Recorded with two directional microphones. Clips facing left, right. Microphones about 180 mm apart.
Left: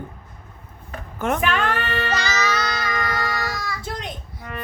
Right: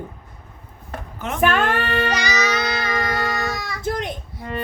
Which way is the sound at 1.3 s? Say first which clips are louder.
Right 7 dB; 50° right (ahead or behind).